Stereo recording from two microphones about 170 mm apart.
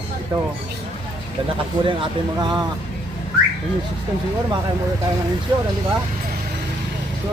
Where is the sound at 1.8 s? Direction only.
30° right (ahead or behind).